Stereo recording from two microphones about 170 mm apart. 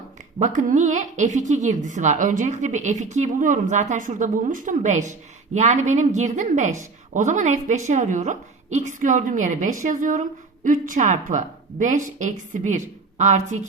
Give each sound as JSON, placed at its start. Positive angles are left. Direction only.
{"t": 0.3, "sound": "a woman's voice", "side_deg": -45}